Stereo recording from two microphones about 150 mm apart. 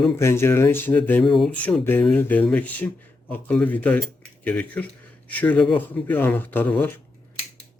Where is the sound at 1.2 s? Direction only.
Centre (ahead or behind).